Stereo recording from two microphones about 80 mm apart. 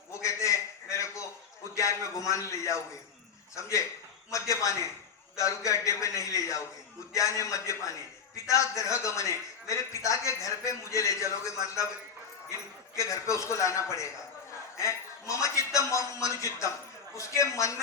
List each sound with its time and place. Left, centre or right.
0.1 s a sound: left
1.7 s a man's voice: left
13.0 s a man's voice: left